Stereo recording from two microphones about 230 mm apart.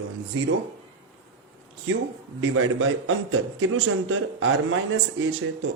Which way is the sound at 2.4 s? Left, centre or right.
Right.